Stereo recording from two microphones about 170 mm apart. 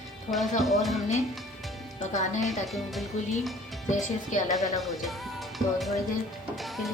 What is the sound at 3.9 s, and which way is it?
Speech, 45° left (ahead or behind).